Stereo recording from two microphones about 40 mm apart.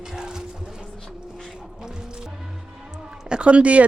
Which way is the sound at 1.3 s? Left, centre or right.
Centre.